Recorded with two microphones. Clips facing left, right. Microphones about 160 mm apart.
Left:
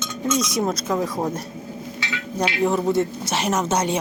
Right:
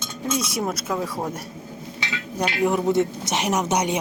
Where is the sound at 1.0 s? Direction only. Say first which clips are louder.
Left 3 dB; 15° left (ahead or behind).